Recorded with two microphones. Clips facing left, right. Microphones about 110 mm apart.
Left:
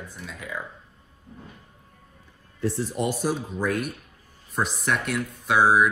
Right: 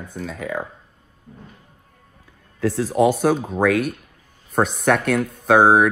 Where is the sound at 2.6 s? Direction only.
90° right.